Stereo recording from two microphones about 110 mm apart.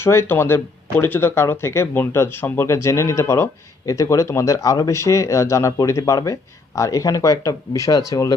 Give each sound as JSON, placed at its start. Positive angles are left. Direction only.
{"t": 0.0, "sound": "speech", "side_deg": 25}